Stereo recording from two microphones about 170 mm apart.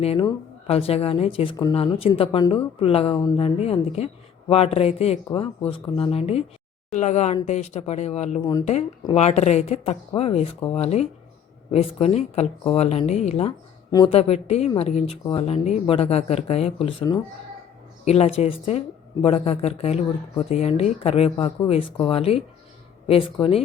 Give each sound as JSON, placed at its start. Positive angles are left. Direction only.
{"t": 0.0, "sound": "speech", "side_deg": 35}
{"t": 8.4, "sound": "speech", "side_deg": 20}
{"t": 9.1, "sound": "speech", "side_deg": 40}
{"t": 18.0, "sound": "speech", "side_deg": 40}